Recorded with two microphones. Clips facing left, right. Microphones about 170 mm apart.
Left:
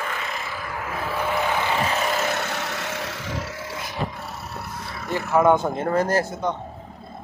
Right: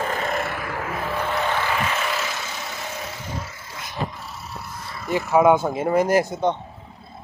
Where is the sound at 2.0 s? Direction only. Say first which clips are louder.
Left 3 dB; 45° left (ahead or behind).